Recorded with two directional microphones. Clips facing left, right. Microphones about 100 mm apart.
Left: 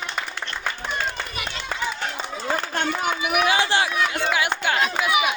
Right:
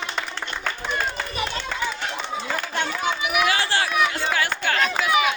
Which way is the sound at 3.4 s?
20° left (ahead or behind).